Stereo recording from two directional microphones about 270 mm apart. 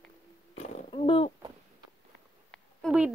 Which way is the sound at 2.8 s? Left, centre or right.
Centre.